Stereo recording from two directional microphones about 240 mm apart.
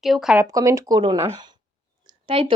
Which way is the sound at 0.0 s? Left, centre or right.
Centre.